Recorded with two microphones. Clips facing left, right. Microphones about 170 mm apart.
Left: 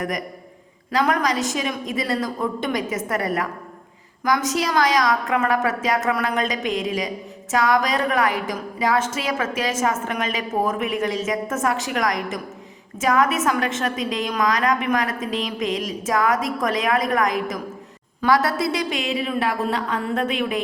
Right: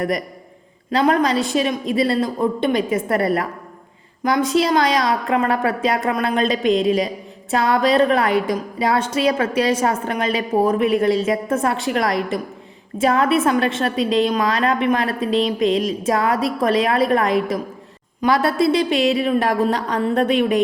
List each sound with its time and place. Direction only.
0.9 s a woman's voice: 30° right (ahead or behind)